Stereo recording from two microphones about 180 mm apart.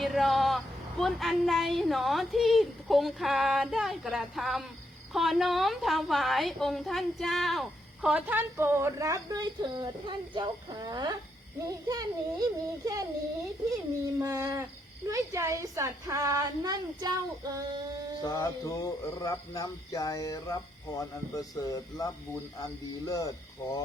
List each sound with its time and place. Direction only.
0.0 s a woman's voice: centre (ahead or behind); by 13.1 s 20° right (ahead or behind)
14.2 s a woman's voice: 15° right (ahead or behind)
18.2 s speech: 20° left (ahead or behind)